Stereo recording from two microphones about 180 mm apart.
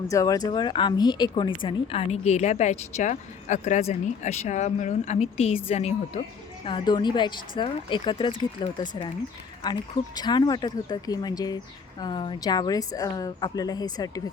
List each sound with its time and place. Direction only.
0.1 s speech: 20° left (ahead or behind)